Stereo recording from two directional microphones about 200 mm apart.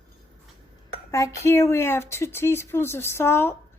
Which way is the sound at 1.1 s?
15° left (ahead or behind).